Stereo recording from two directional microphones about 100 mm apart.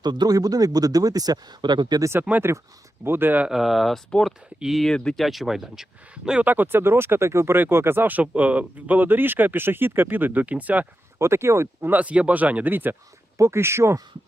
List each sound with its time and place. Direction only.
0.0 s speech: 45° right (ahead or behind)
3.0 s speech: 20° right (ahead or behind)
3.5 s speech: centre (ahead or behind)
11.2 s speech: 25° right (ahead or behind)